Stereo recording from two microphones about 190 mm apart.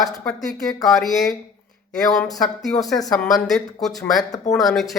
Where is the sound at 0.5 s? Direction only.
20° left (ahead or behind).